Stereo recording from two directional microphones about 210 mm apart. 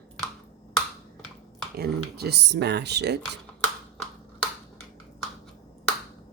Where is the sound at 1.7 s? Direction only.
50° right (ahead or behind).